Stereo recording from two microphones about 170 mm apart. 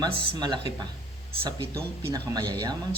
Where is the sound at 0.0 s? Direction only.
30° right (ahead or behind).